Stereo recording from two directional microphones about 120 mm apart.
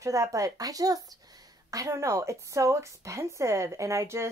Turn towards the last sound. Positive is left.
turn(degrees=-25)  # may be behind; listen again after turning